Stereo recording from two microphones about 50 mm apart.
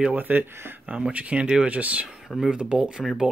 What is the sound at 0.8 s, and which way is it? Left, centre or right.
Speech, right.